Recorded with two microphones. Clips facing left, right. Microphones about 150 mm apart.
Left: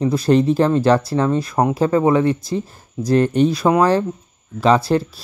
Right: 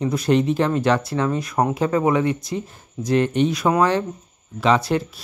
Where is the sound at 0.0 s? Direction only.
30° left (ahead or behind).